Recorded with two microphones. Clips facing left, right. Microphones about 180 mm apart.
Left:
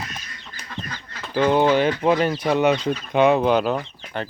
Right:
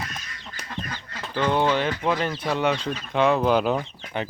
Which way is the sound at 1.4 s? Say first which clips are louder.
Left 5 dB; 10° left (ahead or behind).